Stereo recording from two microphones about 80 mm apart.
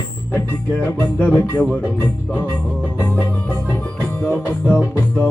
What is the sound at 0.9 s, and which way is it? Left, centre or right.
Music, left.